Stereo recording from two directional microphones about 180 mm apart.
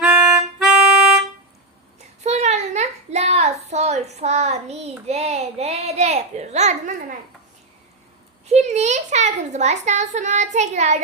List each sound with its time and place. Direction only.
0.0 s music: 5° right (ahead or behind)
2.2 s a sound: 40° right (ahead or behind)
8.4 s a child's voice: 40° right (ahead or behind)